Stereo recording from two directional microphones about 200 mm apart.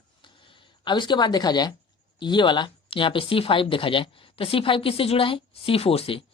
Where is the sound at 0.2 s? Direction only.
25° left (ahead or behind).